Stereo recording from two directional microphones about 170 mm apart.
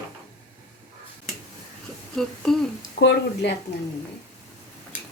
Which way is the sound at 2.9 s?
85° left.